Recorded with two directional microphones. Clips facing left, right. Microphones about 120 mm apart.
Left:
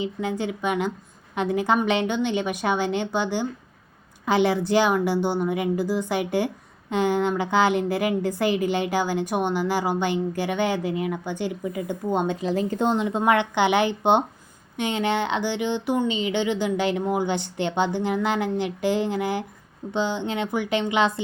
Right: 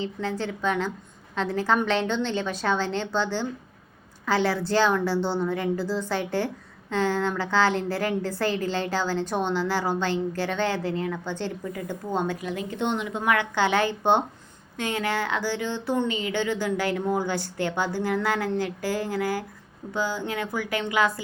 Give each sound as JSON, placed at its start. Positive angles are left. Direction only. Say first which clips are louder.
{"t": 0.0, "sound": "a woman's voice", "louder": "left 2 dB", "side_deg": 15}